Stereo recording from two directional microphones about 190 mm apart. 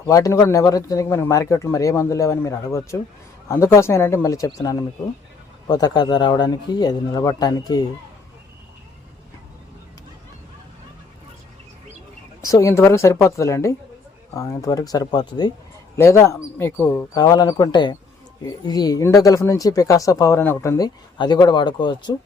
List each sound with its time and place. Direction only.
0.1 s speech: 15° left (ahead or behind)
12.4 s speech: 20° left (ahead or behind)